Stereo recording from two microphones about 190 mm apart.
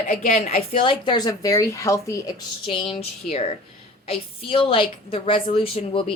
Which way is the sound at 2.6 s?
30° left (ahead or behind).